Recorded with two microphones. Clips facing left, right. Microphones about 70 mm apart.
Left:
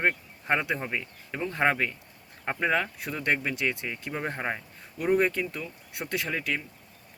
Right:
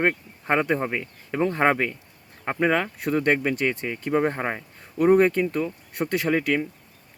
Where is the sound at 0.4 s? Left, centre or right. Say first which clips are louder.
Right 5 dB; right.